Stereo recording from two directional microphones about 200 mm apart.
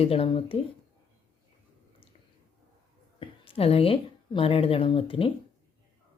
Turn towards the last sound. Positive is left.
turn(degrees=25)  # may be behind; listen again after turning